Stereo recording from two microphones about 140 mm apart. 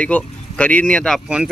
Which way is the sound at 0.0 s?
10° left (ahead or behind).